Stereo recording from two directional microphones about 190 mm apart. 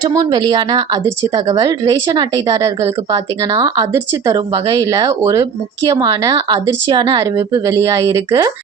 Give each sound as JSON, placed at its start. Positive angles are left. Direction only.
{"t": 0.1, "sound": "speech", "side_deg": -20}